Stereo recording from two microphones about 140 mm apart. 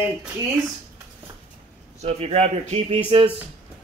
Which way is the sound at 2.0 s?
50° right (ahead or behind).